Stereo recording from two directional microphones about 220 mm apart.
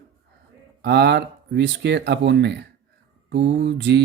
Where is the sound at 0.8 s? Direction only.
50° right (ahead or behind).